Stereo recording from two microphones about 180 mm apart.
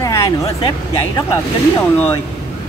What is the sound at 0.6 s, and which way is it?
Speech, 20° left (ahead or behind).